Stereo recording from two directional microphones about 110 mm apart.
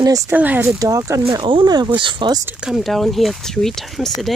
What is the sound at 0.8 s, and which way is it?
Speech, 30° right (ahead or behind).